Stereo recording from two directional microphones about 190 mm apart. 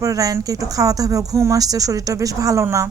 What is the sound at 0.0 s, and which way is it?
Speech, 20° right (ahead or behind).